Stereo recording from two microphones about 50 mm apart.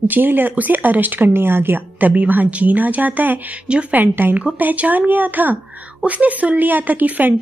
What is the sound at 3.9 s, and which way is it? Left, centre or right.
A woman's voice, right.